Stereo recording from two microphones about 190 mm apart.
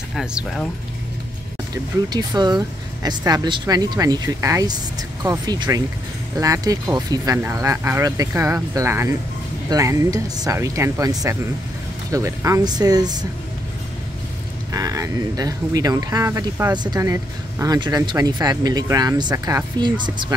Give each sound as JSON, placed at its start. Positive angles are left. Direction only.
{"t": 0.1, "sound": "speech", "side_deg": -5}
{"t": 2.1, "sound": "speech", "side_deg": -20}
{"t": 14.7, "sound": "speech", "side_deg": -15}